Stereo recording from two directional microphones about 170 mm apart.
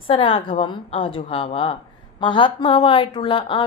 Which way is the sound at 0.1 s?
30° left (ahead or behind).